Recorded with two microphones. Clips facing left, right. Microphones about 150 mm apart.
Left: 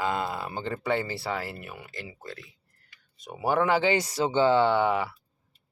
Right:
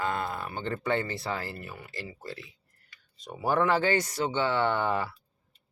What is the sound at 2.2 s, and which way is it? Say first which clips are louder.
Speech: right 1 dB; 5° right (ahead or behind).